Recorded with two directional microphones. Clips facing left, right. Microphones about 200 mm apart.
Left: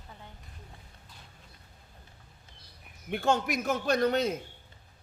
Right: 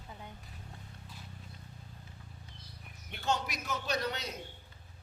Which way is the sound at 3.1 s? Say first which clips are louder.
Left 7 dB; 50° left (ahead or behind).